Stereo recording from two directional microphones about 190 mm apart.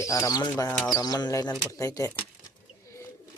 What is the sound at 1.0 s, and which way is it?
Speech, 20° left (ahead or behind).